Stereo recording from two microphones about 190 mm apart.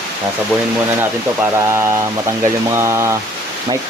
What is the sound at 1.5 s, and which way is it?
Speech, 15° right (ahead or behind).